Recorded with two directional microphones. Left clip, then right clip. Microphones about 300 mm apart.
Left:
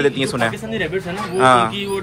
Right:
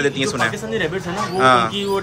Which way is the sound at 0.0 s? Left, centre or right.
Centre.